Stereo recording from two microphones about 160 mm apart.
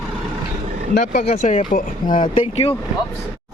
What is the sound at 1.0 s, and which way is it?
Speech, 50° left (ahead or behind).